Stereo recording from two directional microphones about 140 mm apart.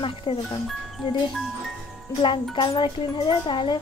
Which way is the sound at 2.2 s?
35° left (ahead or behind).